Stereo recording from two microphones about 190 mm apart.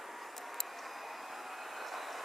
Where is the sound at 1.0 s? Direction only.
Centre (ahead or behind).